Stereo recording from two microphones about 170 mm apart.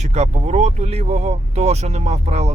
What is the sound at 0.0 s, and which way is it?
Speech, 40° right (ahead or behind).